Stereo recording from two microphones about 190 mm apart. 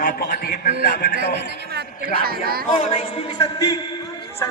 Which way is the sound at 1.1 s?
60° right (ahead or behind).